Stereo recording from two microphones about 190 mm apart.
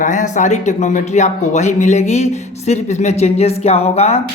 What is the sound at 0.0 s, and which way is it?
Speech, 40° left (ahead or behind).